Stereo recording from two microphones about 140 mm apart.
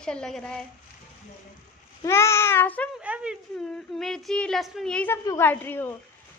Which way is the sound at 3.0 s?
10° right (ahead or behind).